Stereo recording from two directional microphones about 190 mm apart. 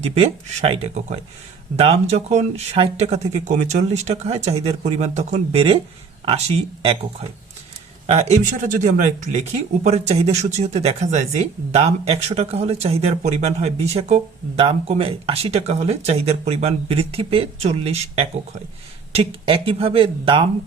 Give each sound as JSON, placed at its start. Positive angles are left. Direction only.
{"t": 0.0, "sound": "speech", "side_deg": -35}